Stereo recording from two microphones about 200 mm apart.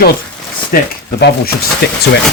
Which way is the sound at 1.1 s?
55° left (ahead or behind).